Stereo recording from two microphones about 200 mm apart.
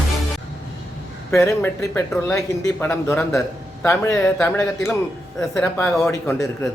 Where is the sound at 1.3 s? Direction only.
10° left (ahead or behind).